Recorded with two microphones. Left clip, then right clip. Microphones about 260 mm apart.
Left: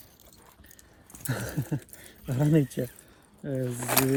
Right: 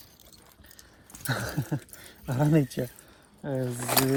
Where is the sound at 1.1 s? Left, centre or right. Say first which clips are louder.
Right 3 dB; centre.